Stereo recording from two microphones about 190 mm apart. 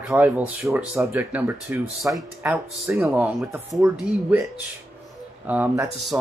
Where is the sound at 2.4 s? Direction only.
15° right (ahead or behind).